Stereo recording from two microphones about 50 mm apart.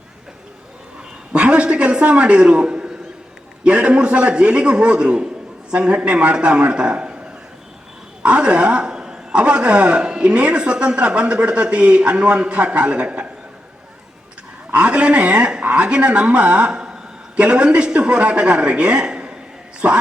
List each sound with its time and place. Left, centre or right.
1.3 s a man's voice: right
8.2 s a man's voice: right
14.7 s a man's voice: right
19.8 s a man's voice: right